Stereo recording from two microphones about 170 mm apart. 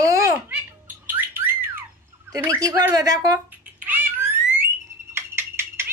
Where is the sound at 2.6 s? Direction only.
20° right (ahead or behind).